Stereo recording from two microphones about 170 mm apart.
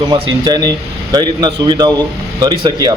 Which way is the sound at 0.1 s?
25° right (ahead or behind).